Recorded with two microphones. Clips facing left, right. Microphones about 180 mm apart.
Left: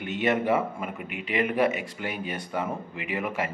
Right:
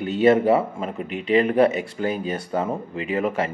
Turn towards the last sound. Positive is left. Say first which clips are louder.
# right 7 dB
turn(degrees=-30)  # may be behind; listen again after turning